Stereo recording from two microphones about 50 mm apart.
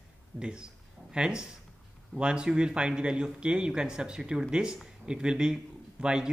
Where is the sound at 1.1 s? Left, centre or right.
Centre.